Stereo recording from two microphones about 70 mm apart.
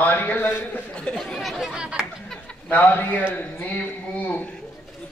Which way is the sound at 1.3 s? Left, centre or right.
Centre.